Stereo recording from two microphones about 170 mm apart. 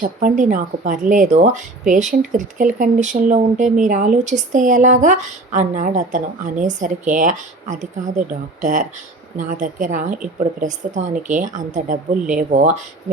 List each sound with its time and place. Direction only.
0.0 s speech: 50° right (ahead or behind)